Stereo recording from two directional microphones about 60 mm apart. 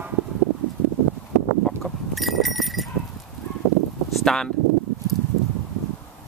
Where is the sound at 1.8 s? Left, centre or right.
Centre.